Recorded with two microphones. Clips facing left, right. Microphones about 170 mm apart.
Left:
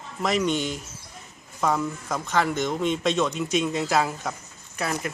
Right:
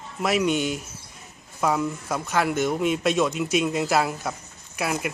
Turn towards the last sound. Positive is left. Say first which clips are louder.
# right 2 dB
turn(degrees=-10)  # may be behind; listen again after turning